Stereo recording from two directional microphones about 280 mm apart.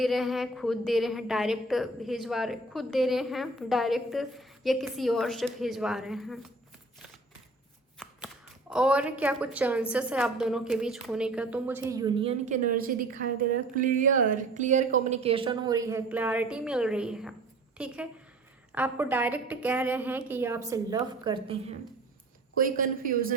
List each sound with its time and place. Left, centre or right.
0.0 s a woman's voice: centre
8.7 s a woman's voice: centre
22.5 s a woman's voice: right